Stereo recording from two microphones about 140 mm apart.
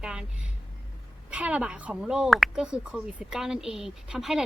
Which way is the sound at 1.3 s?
10° right (ahead or behind).